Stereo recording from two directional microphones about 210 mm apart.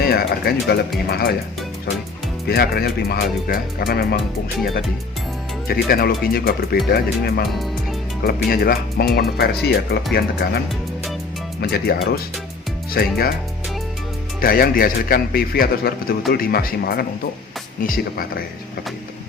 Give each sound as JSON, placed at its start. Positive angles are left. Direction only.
{"t": 0.0, "sound": "music", "side_deg": 45}
{"t": 1.1, "sound": "speech", "side_deg": 45}
{"t": 2.5, "sound": "speech", "side_deg": 45}
{"t": 5.6, "sound": "speech", "side_deg": 45}
{"t": 11.6, "sound": "speech", "side_deg": 45}
{"t": 14.4, "sound": "speech", "side_deg": 45}